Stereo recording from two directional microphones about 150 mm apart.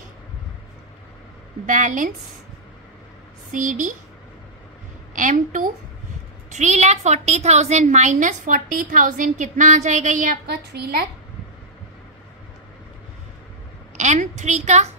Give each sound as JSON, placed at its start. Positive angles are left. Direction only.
{"t": 1.7, "sound": "a woman's voice", "side_deg": -60}
{"t": 3.5, "sound": "a woman's voice", "side_deg": -60}
{"t": 5.1, "sound": "a woman's voice", "side_deg": -60}
{"t": 13.9, "sound": "a woman's voice", "side_deg": -55}